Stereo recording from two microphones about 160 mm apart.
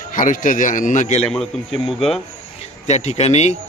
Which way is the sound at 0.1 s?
55° left (ahead or behind).